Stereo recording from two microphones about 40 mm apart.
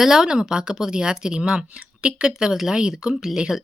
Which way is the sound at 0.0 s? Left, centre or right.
Centre.